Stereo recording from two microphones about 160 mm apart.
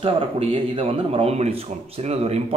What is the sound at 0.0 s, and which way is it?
A man's voice, 35° right (ahead or behind).